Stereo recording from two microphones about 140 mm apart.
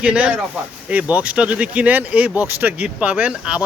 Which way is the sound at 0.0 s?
10° right (ahead or behind).